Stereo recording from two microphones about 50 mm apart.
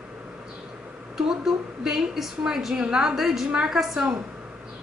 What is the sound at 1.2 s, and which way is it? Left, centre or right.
A woman's voice, centre.